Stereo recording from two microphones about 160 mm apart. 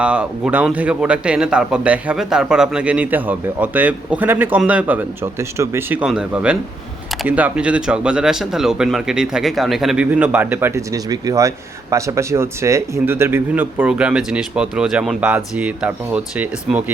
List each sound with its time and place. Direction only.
0.0 s speech: 5° right (ahead or behind)